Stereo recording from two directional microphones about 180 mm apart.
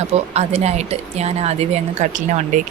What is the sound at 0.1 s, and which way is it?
Speech, 35° right (ahead or behind).